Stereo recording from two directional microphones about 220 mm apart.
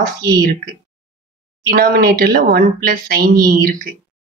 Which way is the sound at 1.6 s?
45° right (ahead or behind).